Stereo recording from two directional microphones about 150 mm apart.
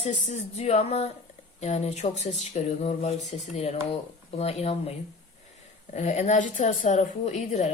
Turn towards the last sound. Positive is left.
turn(degrees=50)  # may be behind; listen again after turning